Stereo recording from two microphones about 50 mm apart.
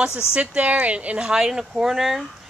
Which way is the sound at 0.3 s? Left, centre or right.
Right.